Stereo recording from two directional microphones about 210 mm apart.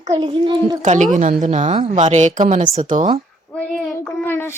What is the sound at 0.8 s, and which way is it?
Speech, 35° right (ahead or behind).